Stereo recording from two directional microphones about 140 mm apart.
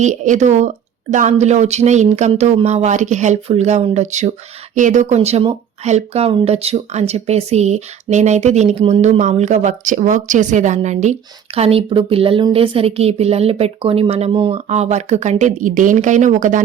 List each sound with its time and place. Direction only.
0.0 s speech: 60° right (ahead or behind); by 14.6 s 40° right (ahead or behind)
14.7 s speech: 55° right (ahead or behind)